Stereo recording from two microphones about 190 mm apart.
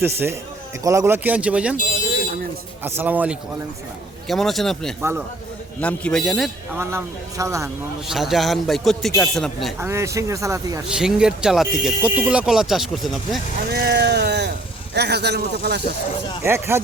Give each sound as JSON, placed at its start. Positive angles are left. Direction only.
{"t": 0.0, "sound": "speech", "side_deg": -10}
{"t": 2.8, "sound": "speech", "side_deg": -10}
{"t": 6.7, "sound": "speech", "side_deg": -15}
{"t": 8.0, "sound": "speech", "side_deg": 0}
{"t": 9.8, "sound": "speech", "side_deg": -15}
{"t": 10.8, "sound": "speech", "side_deg": -5}
{"t": 13.7, "sound": "speech", "side_deg": -60}
{"t": 16.4, "sound": "speech", "side_deg": -15}